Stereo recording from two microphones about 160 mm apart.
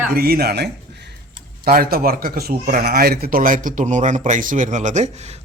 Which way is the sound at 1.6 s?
70° right (ahead or behind).